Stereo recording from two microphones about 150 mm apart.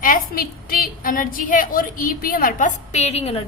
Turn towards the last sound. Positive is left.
turn(degrees=45)  # may be behind; listen again after turning